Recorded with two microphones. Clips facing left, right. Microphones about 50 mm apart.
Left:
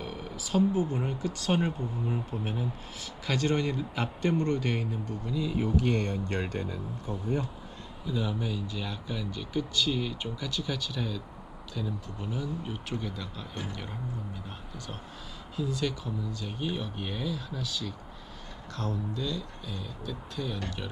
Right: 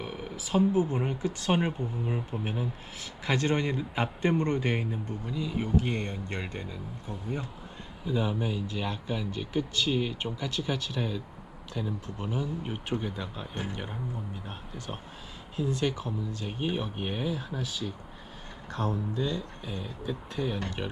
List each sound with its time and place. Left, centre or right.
0.0 s speech: right
8.0 s speech: right
15.5 s speech: right